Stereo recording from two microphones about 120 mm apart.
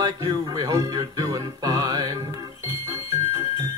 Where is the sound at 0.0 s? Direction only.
35° right (ahead or behind).